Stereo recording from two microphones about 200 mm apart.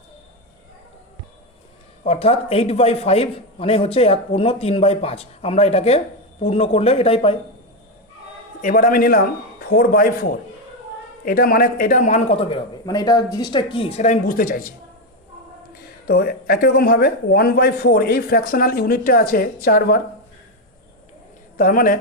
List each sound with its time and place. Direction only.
2.0 s a man's voice: 30° left (ahead or behind)
8.6 s speech: 40° left (ahead or behind)
11.3 s a man's voice: 45° left (ahead or behind)
16.0 s speech: 50° left (ahead or behind)
21.6 s speech: 45° left (ahead or behind)